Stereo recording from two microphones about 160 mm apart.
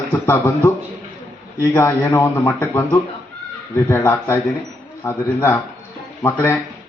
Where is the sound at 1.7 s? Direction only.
10° left (ahead or behind).